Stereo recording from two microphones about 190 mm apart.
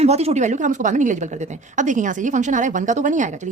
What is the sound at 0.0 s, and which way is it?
A woman's voice, 35° right (ahead or behind).